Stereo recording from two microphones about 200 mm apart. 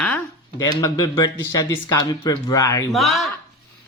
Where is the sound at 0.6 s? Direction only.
20° left (ahead or behind).